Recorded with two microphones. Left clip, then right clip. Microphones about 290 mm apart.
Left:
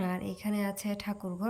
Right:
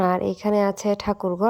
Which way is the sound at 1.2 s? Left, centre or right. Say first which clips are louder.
Right 16 dB; right.